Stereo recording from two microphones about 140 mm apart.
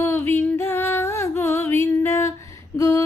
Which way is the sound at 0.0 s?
20° left (ahead or behind).